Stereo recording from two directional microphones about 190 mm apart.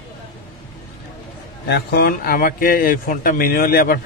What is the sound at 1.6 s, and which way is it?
Speech, 60° left (ahead or behind).